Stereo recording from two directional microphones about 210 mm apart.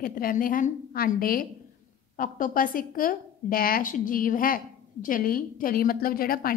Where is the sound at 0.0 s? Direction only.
40° left (ahead or behind).